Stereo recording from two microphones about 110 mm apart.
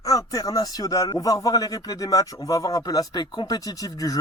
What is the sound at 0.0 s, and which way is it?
Speech, 30° left (ahead or behind).